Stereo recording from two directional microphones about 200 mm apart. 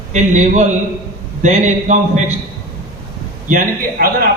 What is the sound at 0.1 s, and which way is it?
A man's voice, 35° right (ahead or behind).